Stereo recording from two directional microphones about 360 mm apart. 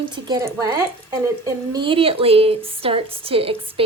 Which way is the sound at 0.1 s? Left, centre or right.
Centre.